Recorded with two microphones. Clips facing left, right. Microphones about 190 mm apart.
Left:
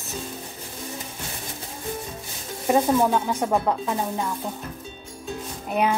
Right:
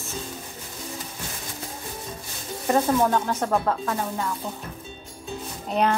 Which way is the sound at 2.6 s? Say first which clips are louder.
Left 1 dB; 10° left (ahead or behind).